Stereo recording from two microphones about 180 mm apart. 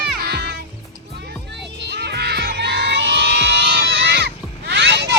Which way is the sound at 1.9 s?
65° right (ahead or behind).